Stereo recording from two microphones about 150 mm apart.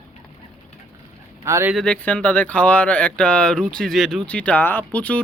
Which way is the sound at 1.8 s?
5° left (ahead or behind).